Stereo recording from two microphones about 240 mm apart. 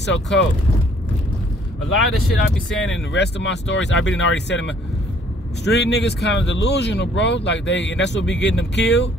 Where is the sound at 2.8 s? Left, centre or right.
Left.